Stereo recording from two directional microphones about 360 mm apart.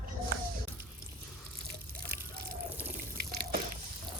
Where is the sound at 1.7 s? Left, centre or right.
Right.